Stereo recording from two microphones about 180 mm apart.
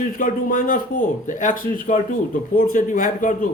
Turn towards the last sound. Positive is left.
turn(degrees=45)  # may be behind; listen again after turning